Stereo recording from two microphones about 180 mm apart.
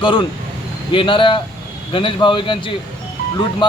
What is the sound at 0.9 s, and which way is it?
A man's voice, 30° left (ahead or behind).